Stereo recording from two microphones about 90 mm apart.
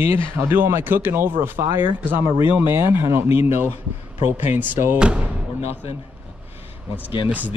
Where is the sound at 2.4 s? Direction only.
65° left (ahead or behind).